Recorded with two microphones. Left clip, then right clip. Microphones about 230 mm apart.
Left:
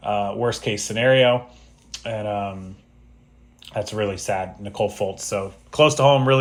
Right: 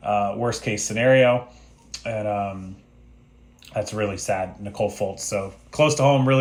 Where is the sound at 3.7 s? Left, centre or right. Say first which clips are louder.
Left 1 dB; left.